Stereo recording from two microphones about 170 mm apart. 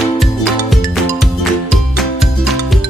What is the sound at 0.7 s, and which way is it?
Music, centre (ahead or behind).